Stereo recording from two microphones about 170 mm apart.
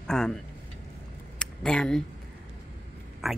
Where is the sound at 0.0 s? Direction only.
5° left (ahead or behind).